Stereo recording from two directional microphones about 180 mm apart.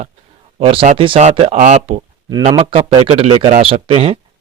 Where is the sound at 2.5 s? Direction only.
30° right (ahead or behind).